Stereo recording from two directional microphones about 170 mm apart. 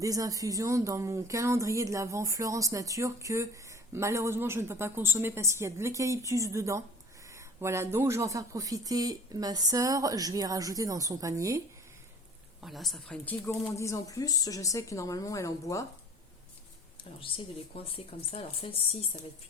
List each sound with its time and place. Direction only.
0.0 s speech: 20° right (ahead or behind)
12.6 s speech: centre (ahead or behind); by 15.9 s 20° left (ahead or behind)
17.0 s speech: 30° left (ahead or behind)